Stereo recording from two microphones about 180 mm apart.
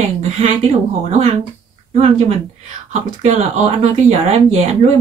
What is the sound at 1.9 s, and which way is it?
Speech, 40° right (ahead or behind).